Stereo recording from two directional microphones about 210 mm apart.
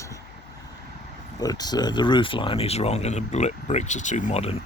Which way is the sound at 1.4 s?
20° left (ahead or behind).